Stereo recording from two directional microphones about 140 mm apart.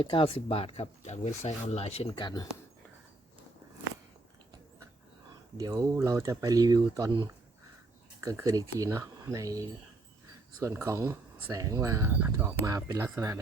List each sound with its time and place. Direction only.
0.0 s speech: 40° left (ahead or behind)
2.0 s speech: 30° left (ahead or behind)
5.3 s speech: 25° right (ahead or behind)
8.2 s speech: 20° right (ahead or behind)